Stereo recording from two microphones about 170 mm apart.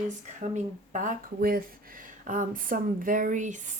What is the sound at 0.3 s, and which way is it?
Speech, 45° right (ahead or behind).